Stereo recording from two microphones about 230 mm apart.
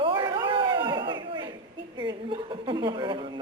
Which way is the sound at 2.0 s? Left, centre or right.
Right.